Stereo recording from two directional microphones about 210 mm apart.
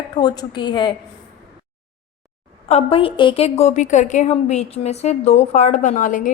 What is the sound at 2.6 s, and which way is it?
A woman's voice, 30° left (ahead or behind).